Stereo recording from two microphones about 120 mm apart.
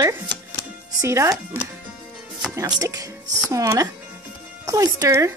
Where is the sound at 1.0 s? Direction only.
25° right (ahead or behind).